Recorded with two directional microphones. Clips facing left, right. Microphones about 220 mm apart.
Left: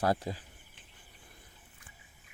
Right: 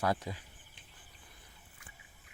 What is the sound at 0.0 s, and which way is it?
Speech, 35° left (ahead or behind).